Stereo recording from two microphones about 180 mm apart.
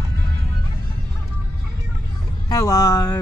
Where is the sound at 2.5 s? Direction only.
20° left (ahead or behind).